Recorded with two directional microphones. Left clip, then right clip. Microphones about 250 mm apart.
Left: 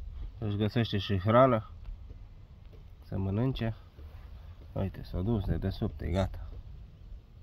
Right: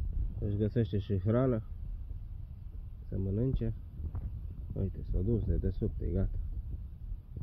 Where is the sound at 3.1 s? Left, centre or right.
Left.